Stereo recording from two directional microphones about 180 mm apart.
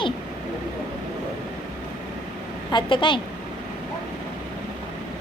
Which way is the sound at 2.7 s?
25° left (ahead or behind).